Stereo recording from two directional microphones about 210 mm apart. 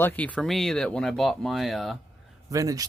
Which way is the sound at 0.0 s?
10° left (ahead or behind).